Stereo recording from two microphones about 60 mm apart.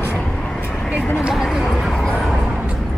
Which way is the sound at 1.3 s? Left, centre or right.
Centre.